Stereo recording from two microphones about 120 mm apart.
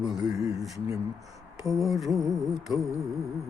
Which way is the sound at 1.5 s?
30° right (ahead or behind).